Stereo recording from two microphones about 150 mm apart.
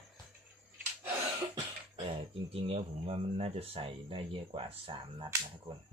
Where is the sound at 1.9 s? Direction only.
40° right (ahead or behind).